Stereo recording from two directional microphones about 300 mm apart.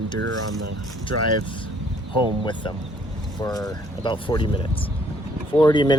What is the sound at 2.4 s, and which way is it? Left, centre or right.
Speech, centre.